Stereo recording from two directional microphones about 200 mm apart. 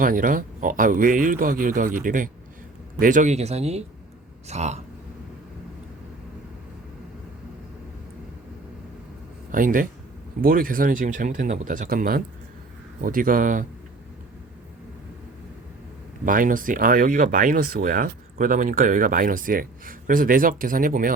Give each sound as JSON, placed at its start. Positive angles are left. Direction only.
{"t": 0.0, "sound": "speech", "side_deg": -40}
{"t": 9.5, "sound": "speech", "side_deg": -40}
{"t": 16.2, "sound": "speech", "side_deg": -45}